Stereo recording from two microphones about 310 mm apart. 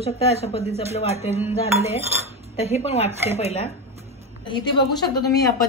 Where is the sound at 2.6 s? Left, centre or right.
Centre.